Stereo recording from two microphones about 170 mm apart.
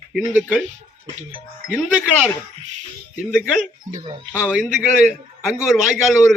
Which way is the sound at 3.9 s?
30° right (ahead or behind).